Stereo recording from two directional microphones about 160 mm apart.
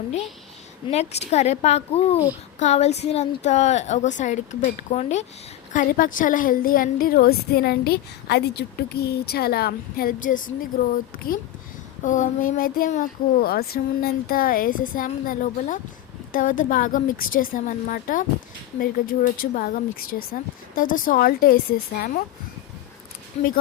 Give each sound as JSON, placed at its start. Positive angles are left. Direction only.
{"t": 0.9, "sound": "a woman's voice", "side_deg": 40}
{"t": 5.7, "sound": "a woman's voice", "side_deg": 55}
{"t": 12.0, "sound": "speech", "side_deg": 50}